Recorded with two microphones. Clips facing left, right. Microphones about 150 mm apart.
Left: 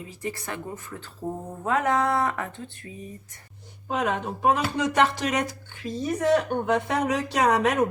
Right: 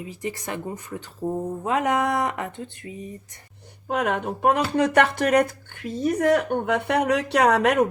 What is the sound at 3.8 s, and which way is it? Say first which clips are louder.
Speech: right 2 dB; 60° right (ahead or behind).